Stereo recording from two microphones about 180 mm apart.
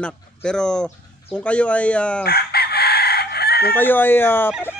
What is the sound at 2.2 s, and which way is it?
Chicken, 60° left (ahead or behind).